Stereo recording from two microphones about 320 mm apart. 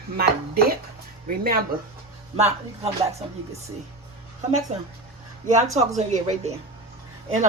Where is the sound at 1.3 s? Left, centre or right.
Right.